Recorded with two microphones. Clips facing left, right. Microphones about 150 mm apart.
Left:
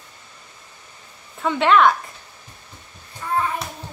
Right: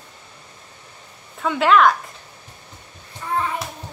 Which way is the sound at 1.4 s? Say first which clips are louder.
Even; centre (ahead or behind).